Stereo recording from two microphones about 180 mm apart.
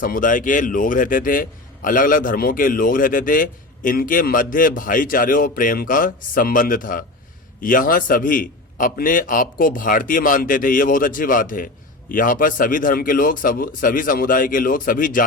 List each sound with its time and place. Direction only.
0.0 s a man's voice: 50° left (ahead or behind)